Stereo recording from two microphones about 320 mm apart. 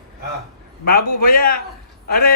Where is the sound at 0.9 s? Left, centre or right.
Left.